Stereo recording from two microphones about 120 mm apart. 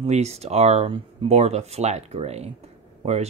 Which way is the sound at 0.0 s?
65° right (ahead or behind).